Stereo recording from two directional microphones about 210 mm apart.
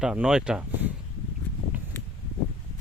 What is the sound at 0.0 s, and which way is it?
Speech, 5° right (ahead or behind).